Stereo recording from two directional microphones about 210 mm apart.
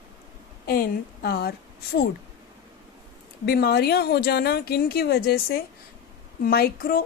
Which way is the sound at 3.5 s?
50° left (ahead or behind).